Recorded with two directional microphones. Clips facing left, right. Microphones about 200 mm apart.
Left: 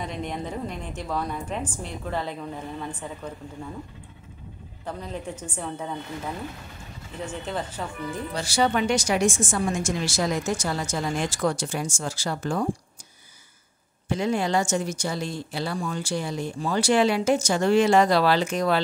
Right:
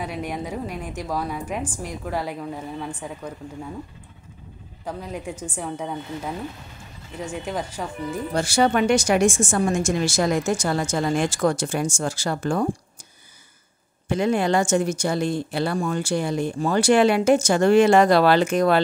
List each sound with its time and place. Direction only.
0.0 s a woman's voice: 10° right (ahead or behind)
4.8 s a woman's voice: 10° right (ahead or behind)
8.3 s a woman's voice: 50° right (ahead or behind)
14.0 s speech: 55° right (ahead or behind)